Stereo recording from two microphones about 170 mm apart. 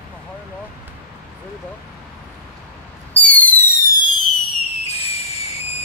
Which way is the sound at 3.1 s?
10° left (ahead or behind).